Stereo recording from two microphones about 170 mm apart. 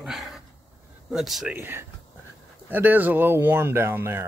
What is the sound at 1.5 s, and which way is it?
Speech, 15° right (ahead or behind).